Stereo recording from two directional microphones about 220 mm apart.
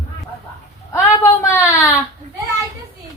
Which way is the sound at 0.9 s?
10° left (ahead or behind).